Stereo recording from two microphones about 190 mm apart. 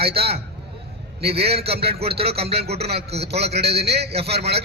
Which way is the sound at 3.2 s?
60° right (ahead or behind).